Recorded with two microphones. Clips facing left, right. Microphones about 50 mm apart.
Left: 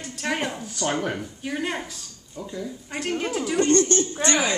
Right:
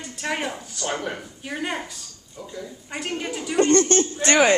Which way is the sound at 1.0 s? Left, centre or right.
Centre.